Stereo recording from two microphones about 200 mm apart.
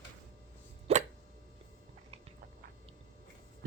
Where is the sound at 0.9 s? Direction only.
30° right (ahead or behind).